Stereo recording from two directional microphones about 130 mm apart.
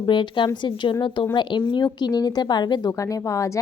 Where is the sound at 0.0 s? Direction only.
40° left (ahead or behind).